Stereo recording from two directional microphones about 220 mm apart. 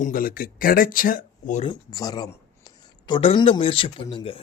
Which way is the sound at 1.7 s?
15° left (ahead or behind).